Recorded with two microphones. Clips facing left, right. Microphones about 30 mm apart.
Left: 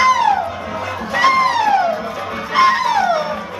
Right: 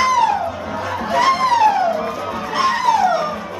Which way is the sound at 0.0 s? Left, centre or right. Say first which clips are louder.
Left 2 dB; centre.